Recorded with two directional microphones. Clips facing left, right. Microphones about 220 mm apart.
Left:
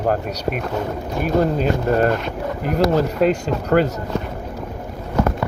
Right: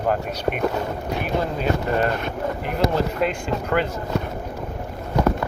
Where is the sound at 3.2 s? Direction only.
40° left (ahead or behind).